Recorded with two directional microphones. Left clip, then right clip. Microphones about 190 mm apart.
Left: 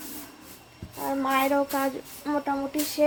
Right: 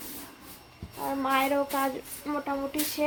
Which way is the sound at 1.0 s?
20° left (ahead or behind).